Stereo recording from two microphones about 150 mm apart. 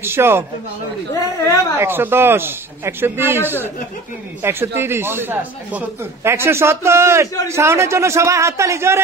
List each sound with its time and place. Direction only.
0.0 s speech: 15° right (ahead or behind)
1.1 s a woman's voice: 20° left (ahead or behind)
1.8 s a man's voice: 15° right (ahead or behind)